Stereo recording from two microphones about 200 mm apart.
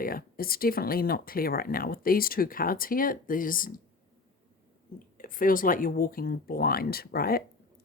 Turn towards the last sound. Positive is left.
turn(degrees=50)  # may be behind; listen again after turning